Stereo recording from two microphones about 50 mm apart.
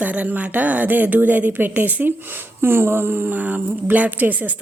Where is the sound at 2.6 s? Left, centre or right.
Right.